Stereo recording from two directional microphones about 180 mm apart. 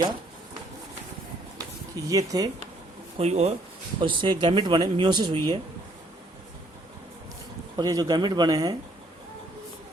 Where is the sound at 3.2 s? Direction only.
35° right (ahead or behind).